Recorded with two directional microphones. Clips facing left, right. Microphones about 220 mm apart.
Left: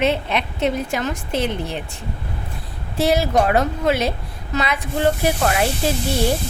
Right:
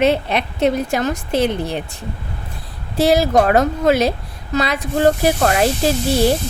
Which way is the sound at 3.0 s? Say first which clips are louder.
Right 4 dB; 35° right (ahead or behind).